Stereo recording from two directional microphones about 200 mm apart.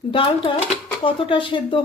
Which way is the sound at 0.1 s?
25° left (ahead or behind).